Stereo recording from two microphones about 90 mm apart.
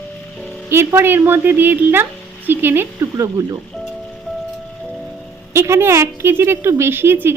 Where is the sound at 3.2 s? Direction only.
40° right (ahead or behind).